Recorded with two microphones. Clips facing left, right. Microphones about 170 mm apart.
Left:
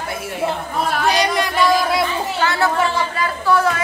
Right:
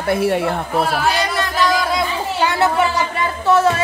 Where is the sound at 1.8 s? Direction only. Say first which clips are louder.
Left 1 dB; 5° left (ahead or behind).